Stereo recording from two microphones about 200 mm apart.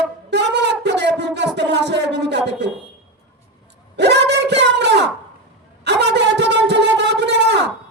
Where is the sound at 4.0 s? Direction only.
60° right (ahead or behind).